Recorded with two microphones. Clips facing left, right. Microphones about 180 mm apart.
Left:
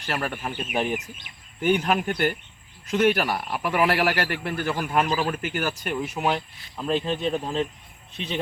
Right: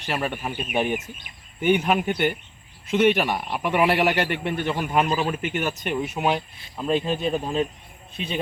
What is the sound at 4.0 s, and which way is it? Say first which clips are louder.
Speech: right 2 dB; 20° right (ahead or behind).